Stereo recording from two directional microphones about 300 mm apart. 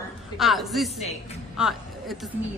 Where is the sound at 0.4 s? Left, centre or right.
Centre.